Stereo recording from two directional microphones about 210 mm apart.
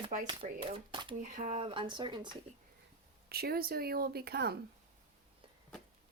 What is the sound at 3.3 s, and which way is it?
Speech, 45° right (ahead or behind).